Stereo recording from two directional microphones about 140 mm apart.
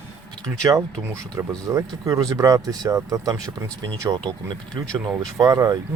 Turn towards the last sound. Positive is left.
turn(degrees=-30)  # may be behind; listen again after turning